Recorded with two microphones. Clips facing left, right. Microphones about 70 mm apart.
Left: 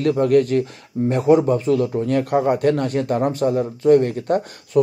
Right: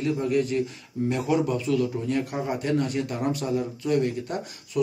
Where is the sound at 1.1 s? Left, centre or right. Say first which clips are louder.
Left 9 dB; left.